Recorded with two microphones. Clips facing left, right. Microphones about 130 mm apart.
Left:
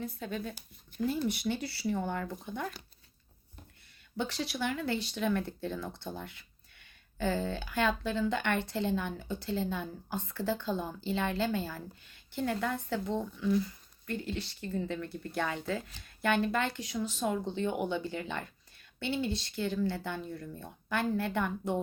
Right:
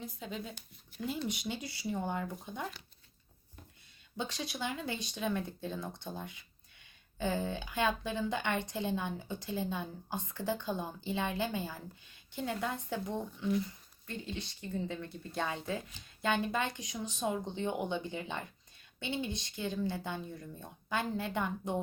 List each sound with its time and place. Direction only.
0.0 s a woman's voice: 15° right (ahead or behind)
4.2 s a woman's voice: 20° right (ahead or behind)
14.2 s a woman's voice: 20° right (ahead or behind)